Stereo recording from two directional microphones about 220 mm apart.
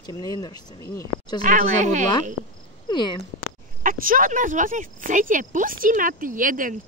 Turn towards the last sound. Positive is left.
turn(degrees=-40)  # may be behind; listen again after turning